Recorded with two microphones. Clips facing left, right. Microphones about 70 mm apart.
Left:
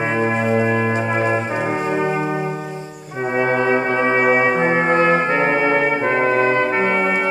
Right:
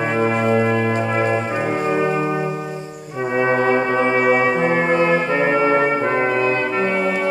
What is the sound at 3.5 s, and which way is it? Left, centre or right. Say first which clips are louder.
Music: right 1 dB; left.